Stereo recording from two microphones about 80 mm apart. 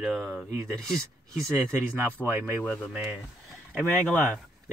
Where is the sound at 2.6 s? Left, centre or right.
Centre.